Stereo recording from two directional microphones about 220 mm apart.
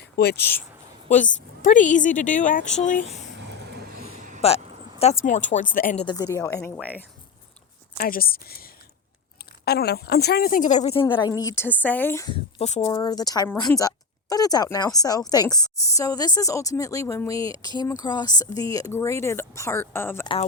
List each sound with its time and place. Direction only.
0.2 s a woman's voice: 45° left (ahead or behind)
1.0 s a woman's voice: 35° left (ahead or behind)
3.4 s vehicle: 50° right (ahead or behind)
4.0 s a sound: 30° right (ahead or behind)
4.4 s a sound: 25° left (ahead or behind)
5.2 s a woman's voice: 35° left (ahead or behind)
6.1 s a woman's voice: 15° left (ahead or behind)
7.9 s a woman's voice: 40° left (ahead or behind)
11.0 s a woman's voice: 20° left (ahead or behind)
12.3 s speech: 30° left (ahead or behind)
12.9 s a woman's voice: 15° left (ahead or behind)
20.2 s speech: 25° left (ahead or behind)